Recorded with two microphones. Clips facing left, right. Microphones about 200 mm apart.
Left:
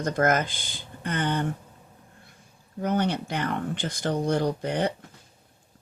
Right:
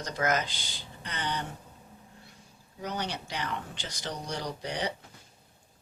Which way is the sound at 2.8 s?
55° left (ahead or behind).